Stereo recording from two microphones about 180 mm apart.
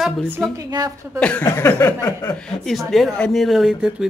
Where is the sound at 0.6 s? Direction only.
20° right (ahead or behind).